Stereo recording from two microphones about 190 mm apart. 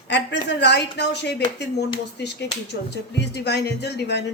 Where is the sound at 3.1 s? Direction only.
65° left (ahead or behind).